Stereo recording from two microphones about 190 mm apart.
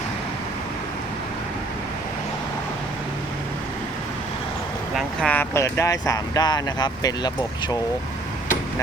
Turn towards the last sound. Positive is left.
turn(degrees=20)  # may be behind; listen again after turning